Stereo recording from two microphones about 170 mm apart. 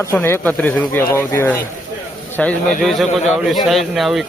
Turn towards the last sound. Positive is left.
turn(degrees=0)  # may be behind; listen again after turning